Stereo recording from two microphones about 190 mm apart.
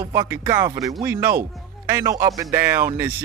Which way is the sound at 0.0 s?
15° right (ahead or behind).